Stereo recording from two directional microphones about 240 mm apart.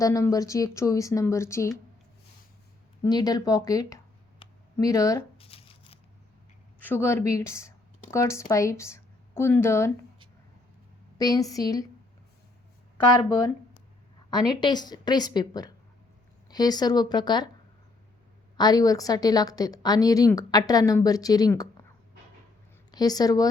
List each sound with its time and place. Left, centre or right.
0.0 s a woman's voice: centre
3.0 s speech: centre
5.5 s tearing: left
6.8 s a woman's voice: centre
11.2 s a woman's voice: centre
14.3 s a woman's voice: centre
18.5 s a woman's voice: centre
22.9 s speech: centre